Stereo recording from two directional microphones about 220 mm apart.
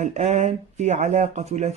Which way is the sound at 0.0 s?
30° right (ahead or behind).